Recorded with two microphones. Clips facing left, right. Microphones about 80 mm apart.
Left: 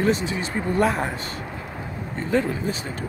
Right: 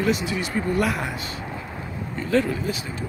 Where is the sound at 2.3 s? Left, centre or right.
Centre.